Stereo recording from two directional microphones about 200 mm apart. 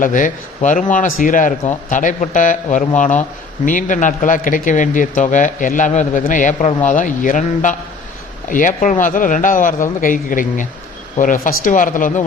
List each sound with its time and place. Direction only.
0.0 s speech: 40° left (ahead or behind)